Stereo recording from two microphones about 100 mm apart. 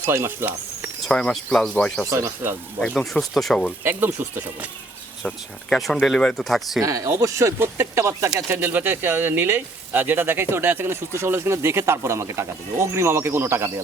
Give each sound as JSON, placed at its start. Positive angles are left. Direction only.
{"t": 0.0, "sound": "speech", "side_deg": -25}
{"t": 1.0, "sound": "speech", "side_deg": 5}
{"t": 2.0, "sound": "speech", "side_deg": -25}
{"t": 2.8, "sound": "speech", "side_deg": 5}
{"t": 3.8, "sound": "speech", "side_deg": -20}
{"t": 5.2, "sound": "speech", "side_deg": 5}
{"t": 6.8, "sound": "speech", "side_deg": -35}